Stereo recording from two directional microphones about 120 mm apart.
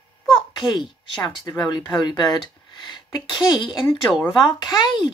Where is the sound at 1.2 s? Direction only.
40° left (ahead or behind).